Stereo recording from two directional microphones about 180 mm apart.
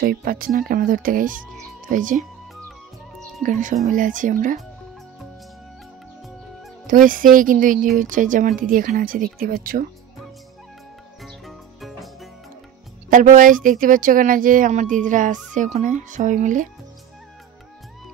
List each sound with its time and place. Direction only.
0.0 s speech: 55° right (ahead or behind)
3.4 s speech: 45° right (ahead or behind)
6.9 s speech: 50° right (ahead or behind)
11.2 s music: centre (ahead or behind)
13.1 s speech: 45° right (ahead or behind)